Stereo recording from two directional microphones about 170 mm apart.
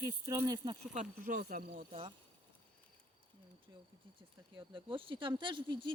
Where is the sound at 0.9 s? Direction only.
50° right (ahead or behind).